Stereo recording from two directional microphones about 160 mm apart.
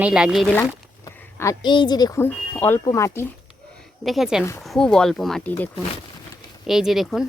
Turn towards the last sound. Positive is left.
turn(degrees=0)  # may be behind; listen again after turning